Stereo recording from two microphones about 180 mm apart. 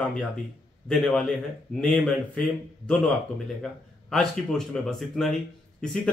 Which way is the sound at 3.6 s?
5° left (ahead or behind).